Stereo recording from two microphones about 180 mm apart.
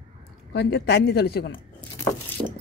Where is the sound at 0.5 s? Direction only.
70° left (ahead or behind).